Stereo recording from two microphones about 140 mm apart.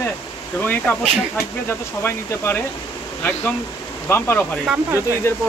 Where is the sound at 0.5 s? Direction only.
15° left (ahead or behind).